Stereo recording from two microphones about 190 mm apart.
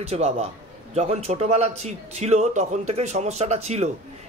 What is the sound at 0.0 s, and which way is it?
Speech, 35° right (ahead or behind).